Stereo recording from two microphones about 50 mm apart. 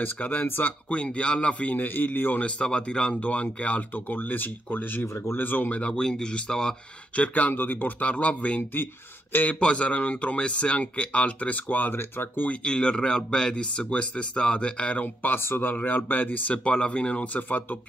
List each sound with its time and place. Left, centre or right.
0.0 s speech: left
0.8 s speech: left
1.9 s speech: left
2.4 s speech: centre; by 5.8 s left
5.8 s speech: left
7.2 s speech: left
9.6 s speech: left
11.9 s speech: left
12.6 s speech: centre
15.2 s speech: left
17.4 s speech: left